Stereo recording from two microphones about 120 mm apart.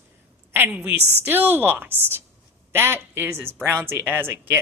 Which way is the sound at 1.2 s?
15° right (ahead or behind).